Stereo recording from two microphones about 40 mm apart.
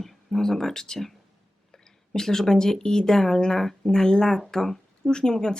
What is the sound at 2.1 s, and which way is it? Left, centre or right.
Speech, centre.